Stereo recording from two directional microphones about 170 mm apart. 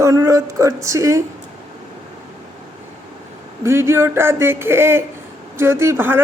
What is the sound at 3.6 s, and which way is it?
Speech, 15° right (ahead or behind).